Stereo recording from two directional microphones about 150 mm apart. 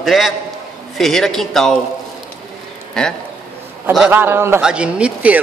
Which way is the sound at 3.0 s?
5° left (ahead or behind).